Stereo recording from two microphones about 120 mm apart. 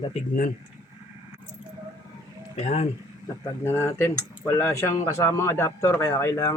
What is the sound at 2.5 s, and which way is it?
Speech, 65° left (ahead or behind).